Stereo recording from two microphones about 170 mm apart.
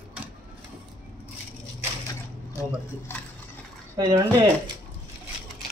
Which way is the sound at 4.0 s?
20° right (ahead or behind).